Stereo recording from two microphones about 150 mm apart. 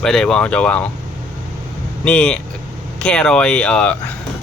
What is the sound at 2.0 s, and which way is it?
Speech, 10° left (ahead or behind).